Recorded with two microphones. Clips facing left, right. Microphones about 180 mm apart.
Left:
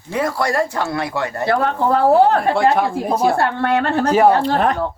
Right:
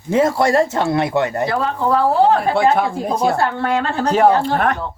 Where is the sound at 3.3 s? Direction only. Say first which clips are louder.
Left 1 dB; 60° left (ahead or behind).